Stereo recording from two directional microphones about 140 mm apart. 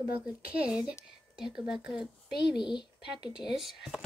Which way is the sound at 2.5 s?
30° left (ahead or behind).